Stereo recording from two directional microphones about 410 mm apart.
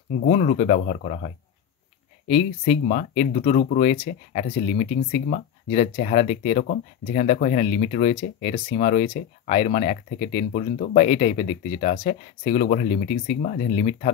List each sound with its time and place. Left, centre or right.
0.2 s speech: centre